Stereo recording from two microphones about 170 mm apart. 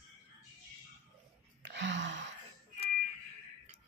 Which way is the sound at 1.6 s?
90° right.